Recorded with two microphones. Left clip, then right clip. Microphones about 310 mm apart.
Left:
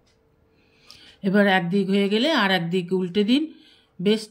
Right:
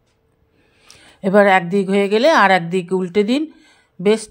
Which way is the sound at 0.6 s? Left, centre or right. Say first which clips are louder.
Right 2 dB; centre.